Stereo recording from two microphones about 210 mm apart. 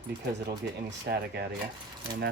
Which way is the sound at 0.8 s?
50° right (ahead or behind).